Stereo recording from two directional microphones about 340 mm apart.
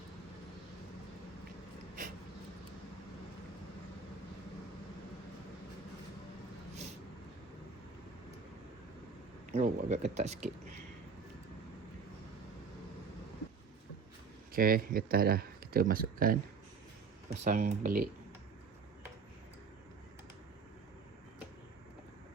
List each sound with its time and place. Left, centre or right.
9.5 s speech: right
14.5 s speech: right